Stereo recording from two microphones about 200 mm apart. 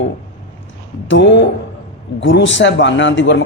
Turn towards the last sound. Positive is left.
turn(degrees=65)  # may be behind; listen again after turning